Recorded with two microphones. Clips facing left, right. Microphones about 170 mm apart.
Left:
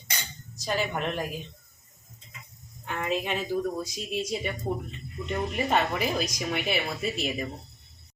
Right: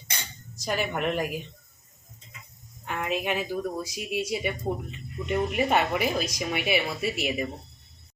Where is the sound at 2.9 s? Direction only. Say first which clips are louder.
Right 1 dB; 10° right (ahead or behind).